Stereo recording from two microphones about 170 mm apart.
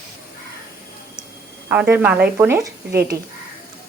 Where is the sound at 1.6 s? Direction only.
10° right (ahead or behind).